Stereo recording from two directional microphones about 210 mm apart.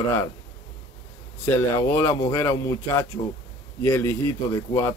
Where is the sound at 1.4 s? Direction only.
10° left (ahead or behind).